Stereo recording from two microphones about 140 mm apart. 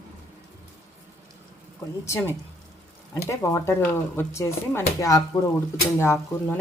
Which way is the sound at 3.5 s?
20° left (ahead or behind).